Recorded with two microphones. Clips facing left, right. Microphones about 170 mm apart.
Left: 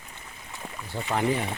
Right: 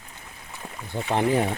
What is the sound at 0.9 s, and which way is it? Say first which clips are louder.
Speech: right 3 dB; 25° right (ahead or behind).